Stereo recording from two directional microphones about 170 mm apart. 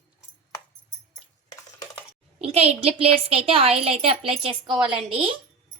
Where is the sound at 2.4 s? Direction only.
35° right (ahead or behind).